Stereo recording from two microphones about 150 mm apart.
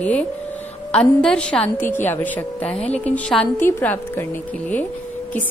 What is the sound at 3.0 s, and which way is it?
Speech, 10° left (ahead or behind).